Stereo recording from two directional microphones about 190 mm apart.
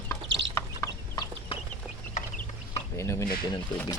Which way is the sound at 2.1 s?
40° left (ahead or behind).